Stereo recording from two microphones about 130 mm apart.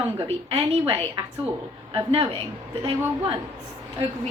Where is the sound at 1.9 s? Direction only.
40° right (ahead or behind).